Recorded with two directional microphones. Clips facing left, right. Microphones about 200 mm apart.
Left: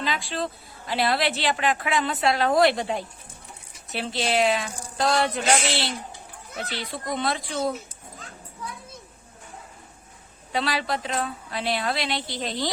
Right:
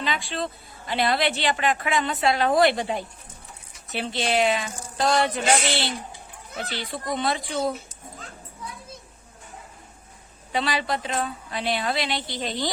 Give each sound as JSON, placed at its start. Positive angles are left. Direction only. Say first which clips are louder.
{"t": 0.0, "sound": "a woman's voice", "louder": "even", "side_deg": 0}
{"t": 10.5, "sound": "a woman's voice", "louder": "right 1 dB", "side_deg": 0}